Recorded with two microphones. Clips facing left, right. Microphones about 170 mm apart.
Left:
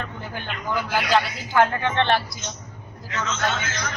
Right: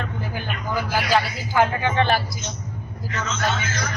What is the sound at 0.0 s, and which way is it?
Speech, 5° right (ahead or behind).